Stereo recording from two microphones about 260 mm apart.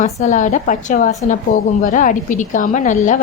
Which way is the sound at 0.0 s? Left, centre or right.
Left.